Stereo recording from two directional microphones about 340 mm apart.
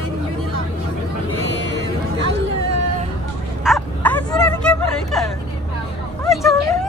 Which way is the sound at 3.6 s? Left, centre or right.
Centre.